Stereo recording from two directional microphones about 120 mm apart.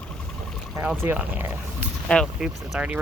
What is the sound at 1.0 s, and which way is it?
Speech, 15° right (ahead or behind).